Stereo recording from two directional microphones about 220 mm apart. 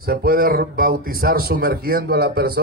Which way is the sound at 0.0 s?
45° right (ahead or behind).